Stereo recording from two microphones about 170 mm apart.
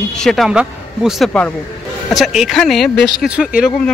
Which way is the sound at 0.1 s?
5° left (ahead or behind).